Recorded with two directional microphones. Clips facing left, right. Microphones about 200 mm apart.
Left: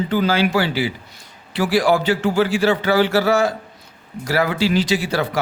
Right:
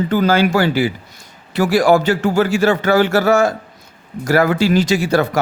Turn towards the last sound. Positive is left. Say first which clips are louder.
# right 5 dB
turn(degrees=-45)  # may be behind; listen again after turning